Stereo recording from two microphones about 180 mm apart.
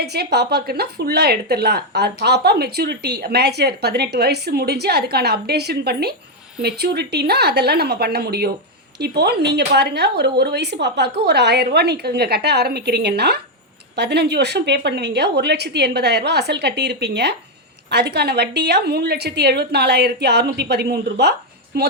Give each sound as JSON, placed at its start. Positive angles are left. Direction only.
{"t": 0.0, "sound": "a woman's voice", "side_deg": -65}